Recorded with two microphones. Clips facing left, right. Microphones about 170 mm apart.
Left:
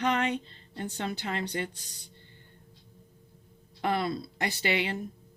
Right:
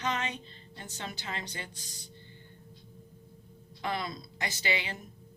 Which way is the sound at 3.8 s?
55° left (ahead or behind).